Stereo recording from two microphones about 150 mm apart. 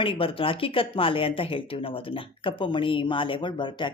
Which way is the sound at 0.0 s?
35° left (ahead or behind).